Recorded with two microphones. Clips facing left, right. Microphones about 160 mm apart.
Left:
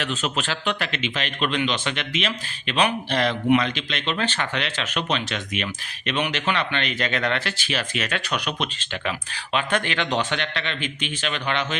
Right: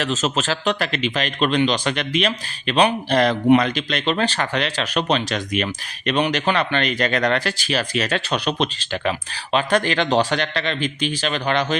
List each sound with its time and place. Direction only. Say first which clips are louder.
0.0 s speech: right 5 dB; 40° right (ahead or behind)